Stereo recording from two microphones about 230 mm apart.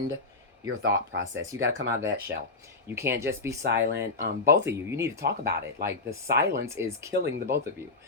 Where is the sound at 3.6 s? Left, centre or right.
Right.